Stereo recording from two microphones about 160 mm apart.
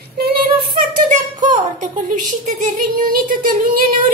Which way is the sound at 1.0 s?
50° right (ahead or behind).